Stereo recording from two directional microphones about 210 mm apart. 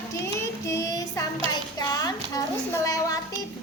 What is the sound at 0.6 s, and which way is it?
Child singing, 15° left (ahead or behind).